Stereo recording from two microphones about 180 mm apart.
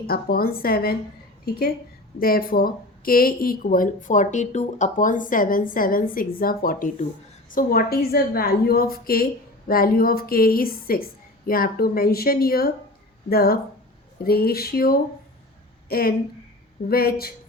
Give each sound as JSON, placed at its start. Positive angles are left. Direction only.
{"t": 0.1, "sound": "a woman's voice", "side_deg": 55}